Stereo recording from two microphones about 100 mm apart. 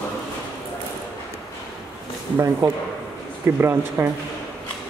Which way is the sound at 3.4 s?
25° right (ahead or behind).